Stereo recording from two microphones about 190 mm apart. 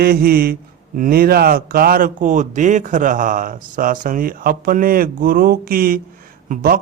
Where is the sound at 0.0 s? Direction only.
50° right (ahead or behind).